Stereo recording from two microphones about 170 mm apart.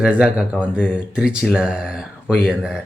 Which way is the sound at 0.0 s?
5° right (ahead or behind).